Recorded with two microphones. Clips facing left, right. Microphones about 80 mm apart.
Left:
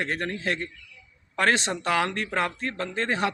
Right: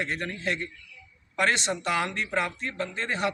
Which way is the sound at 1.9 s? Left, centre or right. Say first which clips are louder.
Left 3 dB; left.